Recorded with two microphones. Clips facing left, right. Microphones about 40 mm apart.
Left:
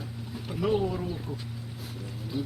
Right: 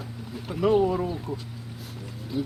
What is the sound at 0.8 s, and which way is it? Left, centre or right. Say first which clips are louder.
Speech: right 6 dB; centre.